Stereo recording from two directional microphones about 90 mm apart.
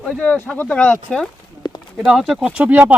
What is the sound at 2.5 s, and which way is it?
Speech, 20° right (ahead or behind).